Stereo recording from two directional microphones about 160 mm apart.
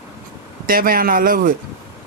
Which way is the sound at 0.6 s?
65° right (ahead or behind).